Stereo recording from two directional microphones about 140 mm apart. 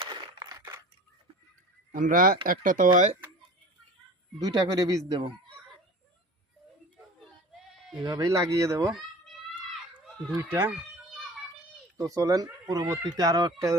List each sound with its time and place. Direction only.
0.0 s a sound: 30° right (ahead or behind)
1.9 s speech: 70° right (ahead or behind); by 2.4 s 90° right
2.5 s speech: 70° right (ahead or behind)
4.4 s speech: 30° right (ahead or behind)
8.0 s speech: 25° right (ahead or behind)
9.6 s a sound: 10° left (ahead or behind)
10.3 s speech: 20° right (ahead or behind)
11.9 s speech: 25° right (ahead or behind)